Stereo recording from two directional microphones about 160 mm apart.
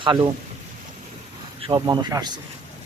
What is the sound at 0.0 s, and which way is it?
Speech, 30° right (ahead or behind).